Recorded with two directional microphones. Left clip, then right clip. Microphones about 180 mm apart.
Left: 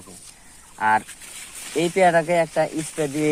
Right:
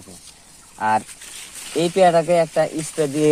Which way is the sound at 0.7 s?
35° right (ahead or behind).